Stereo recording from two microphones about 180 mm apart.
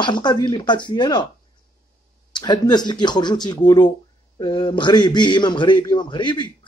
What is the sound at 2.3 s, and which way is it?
A man's voice, 25° left (ahead or behind).